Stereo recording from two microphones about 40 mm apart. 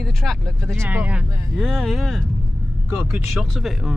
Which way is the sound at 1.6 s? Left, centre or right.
Centre.